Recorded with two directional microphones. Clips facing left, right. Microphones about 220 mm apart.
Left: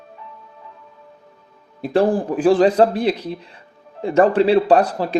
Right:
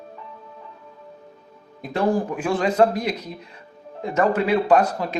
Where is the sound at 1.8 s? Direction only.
30° left (ahead or behind).